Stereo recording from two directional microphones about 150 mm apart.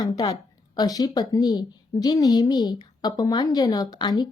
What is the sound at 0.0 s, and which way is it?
A woman's voice, 25° left (ahead or behind).